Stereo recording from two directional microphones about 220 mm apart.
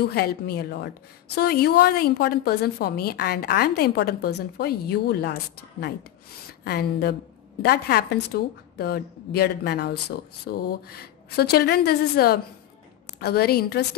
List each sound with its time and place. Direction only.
0.0 s a woman's voice: 45° left (ahead or behind)